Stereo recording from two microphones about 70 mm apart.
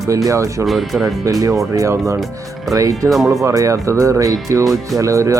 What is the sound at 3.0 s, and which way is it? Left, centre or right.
Speech, right.